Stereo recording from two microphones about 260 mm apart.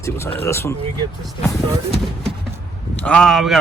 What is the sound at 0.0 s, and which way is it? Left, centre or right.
Speech, centre.